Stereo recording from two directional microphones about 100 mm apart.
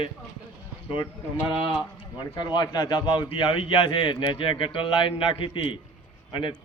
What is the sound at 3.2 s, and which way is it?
Speech, 55° left (ahead or behind).